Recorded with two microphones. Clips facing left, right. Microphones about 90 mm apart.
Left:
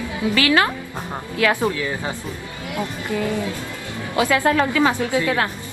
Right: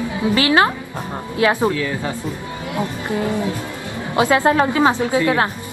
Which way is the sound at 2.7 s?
25° right (ahead or behind).